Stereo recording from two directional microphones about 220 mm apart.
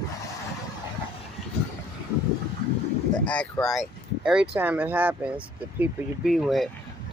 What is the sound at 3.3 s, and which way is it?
Speech, 5° left (ahead or behind).